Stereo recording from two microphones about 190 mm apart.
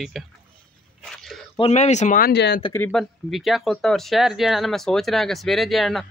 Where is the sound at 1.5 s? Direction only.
35° left (ahead or behind).